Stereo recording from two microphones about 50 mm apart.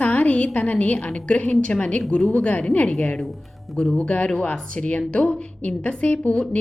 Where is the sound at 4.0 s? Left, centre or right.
Left.